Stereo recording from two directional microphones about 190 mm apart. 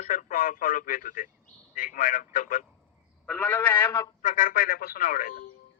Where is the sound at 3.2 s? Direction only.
5° left (ahead or behind).